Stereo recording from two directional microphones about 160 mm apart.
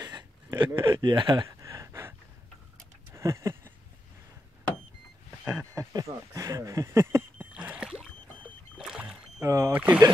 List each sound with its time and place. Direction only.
0.0 s a sound: 25° right (ahead or behind)
5.4 s speech: 15° right (ahead or behind)
8.7 s rowboat: 5° right (ahead or behind)
9.4 s speech: 20° right (ahead or behind)
9.7 s speech: 10° right (ahead or behind)